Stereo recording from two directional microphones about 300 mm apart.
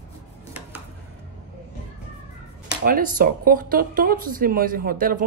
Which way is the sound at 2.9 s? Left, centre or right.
Right.